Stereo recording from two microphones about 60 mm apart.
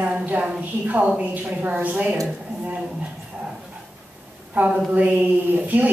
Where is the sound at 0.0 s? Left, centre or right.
Right.